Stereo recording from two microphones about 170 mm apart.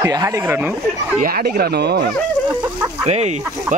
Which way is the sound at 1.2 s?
60° right (ahead or behind).